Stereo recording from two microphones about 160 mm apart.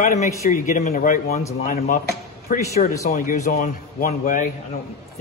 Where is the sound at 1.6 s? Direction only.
60° left (ahead or behind).